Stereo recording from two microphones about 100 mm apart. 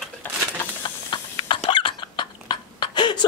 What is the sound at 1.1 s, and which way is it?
Cough, 55° left (ahead or behind).